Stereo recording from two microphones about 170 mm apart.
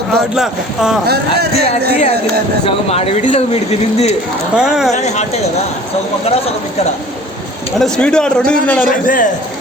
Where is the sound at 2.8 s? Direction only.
40° left (ahead or behind).